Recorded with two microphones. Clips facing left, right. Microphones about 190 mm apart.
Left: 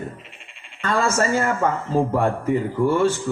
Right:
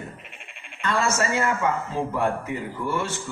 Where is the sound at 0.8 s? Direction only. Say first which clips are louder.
Left 3 dB; 40° left (ahead or behind).